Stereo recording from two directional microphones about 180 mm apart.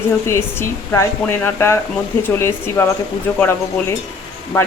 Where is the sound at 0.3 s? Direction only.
15° left (ahead or behind).